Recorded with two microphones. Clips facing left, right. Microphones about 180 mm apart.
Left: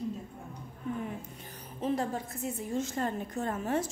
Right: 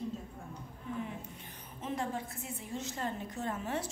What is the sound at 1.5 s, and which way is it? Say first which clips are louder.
A woman's voice: left 9 dB; 35° left (ahead or behind).